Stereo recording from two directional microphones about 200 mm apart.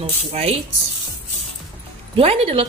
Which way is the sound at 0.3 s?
30° right (ahead or behind).